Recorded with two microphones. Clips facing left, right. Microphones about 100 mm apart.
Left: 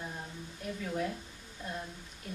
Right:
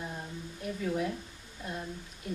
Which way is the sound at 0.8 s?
10° right (ahead or behind).